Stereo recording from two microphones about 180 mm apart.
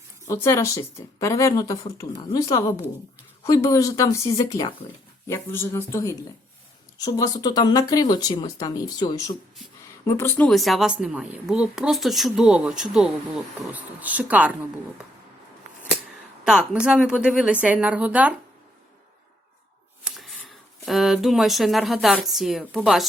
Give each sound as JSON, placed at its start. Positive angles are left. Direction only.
{"t": 0.3, "sound": "speech", "side_deg": 15}
{"t": 16.4, "sound": "a woman's voice", "side_deg": -5}
{"t": 20.1, "sound": "speech", "side_deg": -5}